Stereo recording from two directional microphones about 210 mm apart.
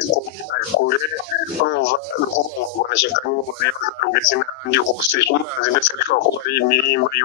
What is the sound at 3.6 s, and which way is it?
Speech, 50° left (ahead or behind).